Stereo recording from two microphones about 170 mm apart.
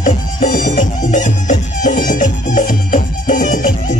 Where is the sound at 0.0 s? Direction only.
50° left (ahead or behind).